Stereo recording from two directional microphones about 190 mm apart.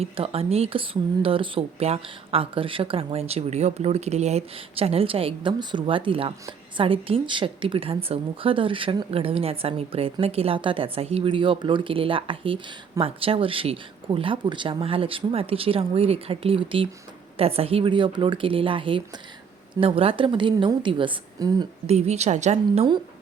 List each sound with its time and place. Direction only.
0.0 s a woman's voice: 30° right (ahead or behind)
21.8 s a woman's voice: 35° right (ahead or behind)